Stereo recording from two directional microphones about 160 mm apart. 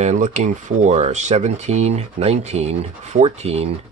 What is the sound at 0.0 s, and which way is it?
Speech, 50° right (ahead or behind).